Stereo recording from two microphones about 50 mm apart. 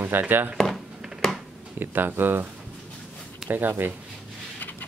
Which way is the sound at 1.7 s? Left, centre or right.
Right.